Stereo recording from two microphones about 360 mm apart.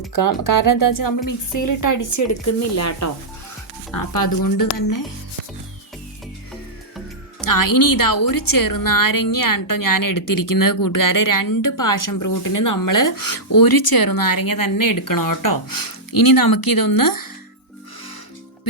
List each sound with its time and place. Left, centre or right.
0.1 s a woman's voice: left
4.1 s a woman's voice: left
7.4 s a woman's voice: left